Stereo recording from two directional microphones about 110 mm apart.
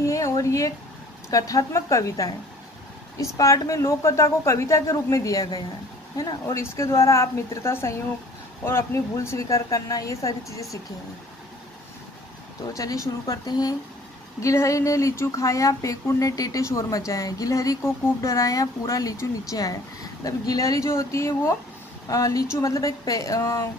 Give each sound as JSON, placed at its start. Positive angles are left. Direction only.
{"t": 0.0, "sound": "a sound", "side_deg": 30}
{"t": 1.3, "sound": "speech", "side_deg": 30}
{"t": 12.7, "sound": "speech", "side_deg": 30}